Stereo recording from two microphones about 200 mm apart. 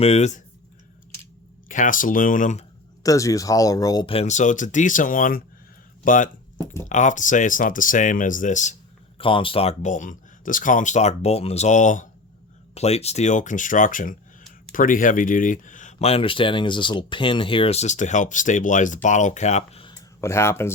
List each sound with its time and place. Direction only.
0.0 s speech: 35° left (ahead or behind)
1.6 s speech: 40° left (ahead or behind)
3.0 s speech: 15° left (ahead or behind); by 8.7 s 40° left (ahead or behind)
9.1 s speech: 25° left (ahead or behind)
20.2 s speech: 15° left (ahead or behind)